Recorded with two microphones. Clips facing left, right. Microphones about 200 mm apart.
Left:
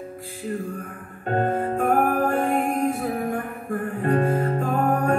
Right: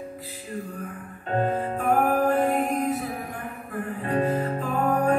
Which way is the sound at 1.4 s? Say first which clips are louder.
Left 3 dB; 50° left (ahead or behind).